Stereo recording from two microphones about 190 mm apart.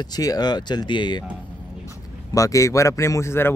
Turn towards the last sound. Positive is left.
turn(degrees=15)  # may be behind; listen again after turning